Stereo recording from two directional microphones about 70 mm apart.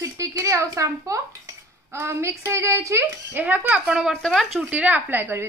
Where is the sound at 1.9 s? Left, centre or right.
Right.